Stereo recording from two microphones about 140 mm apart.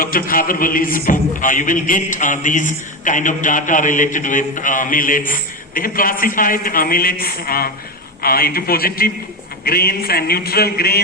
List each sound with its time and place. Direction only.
0.0 s speech: 90° left